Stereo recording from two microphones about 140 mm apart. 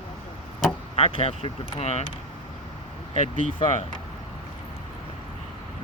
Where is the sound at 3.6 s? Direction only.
55° left (ahead or behind).